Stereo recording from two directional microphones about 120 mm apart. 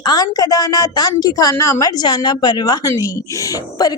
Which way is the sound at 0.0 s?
30° left (ahead or behind).